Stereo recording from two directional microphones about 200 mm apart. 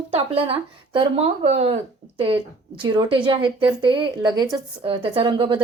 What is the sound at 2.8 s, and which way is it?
Speech, 20° right (ahead or behind).